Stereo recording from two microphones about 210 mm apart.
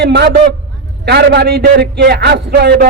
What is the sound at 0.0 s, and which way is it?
A man's voice, 50° right (ahead or behind).